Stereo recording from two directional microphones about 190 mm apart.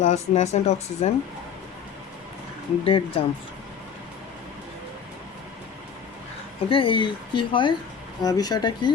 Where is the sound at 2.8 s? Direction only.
30° left (ahead or behind).